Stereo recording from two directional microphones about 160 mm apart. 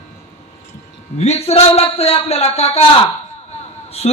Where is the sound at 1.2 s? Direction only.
40° left (ahead or behind).